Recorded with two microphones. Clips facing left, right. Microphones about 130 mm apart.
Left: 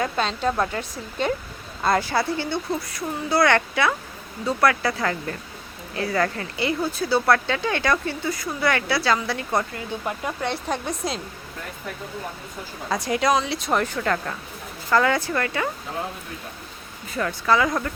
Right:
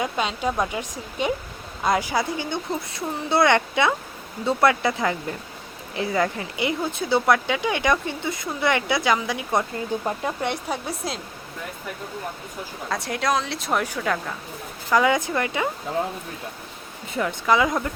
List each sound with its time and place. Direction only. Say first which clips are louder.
0.0 s speech: left 1 dB; 10° right (ahead or behind)
10.7 s a woman's voice: left 2 dB; 5° right (ahead or behind)
12.9 s a woman's voice: left 3 dB; centre (ahead or behind); by 15.7 s 15° right (ahead or behind)
17.1 s speech: even; 15° right (ahead or behind)